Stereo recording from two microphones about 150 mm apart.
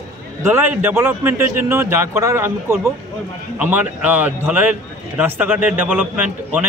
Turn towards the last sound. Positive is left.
turn(degrees=-10)  # may be behind; listen again after turning